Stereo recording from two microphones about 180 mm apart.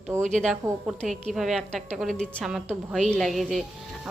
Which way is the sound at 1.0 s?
Centre (ahead or behind).